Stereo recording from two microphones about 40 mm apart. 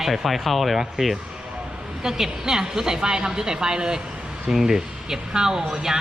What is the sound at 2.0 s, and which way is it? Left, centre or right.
A woman's voice, centre.